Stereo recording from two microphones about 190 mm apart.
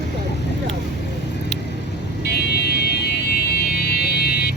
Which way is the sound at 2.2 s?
55° left (ahead or behind).